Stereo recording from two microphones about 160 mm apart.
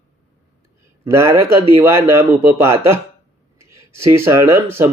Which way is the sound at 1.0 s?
15° right (ahead or behind).